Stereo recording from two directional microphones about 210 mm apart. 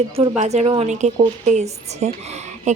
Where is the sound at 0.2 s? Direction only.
30° right (ahead or behind).